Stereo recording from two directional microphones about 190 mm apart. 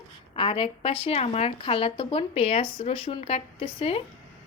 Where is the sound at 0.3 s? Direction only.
25° left (ahead or behind).